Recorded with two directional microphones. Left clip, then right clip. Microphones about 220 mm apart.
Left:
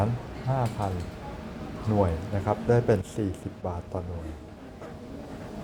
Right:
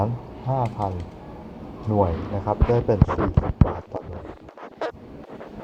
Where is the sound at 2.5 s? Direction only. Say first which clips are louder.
Right 2 dB; 25° left (ahead or behind).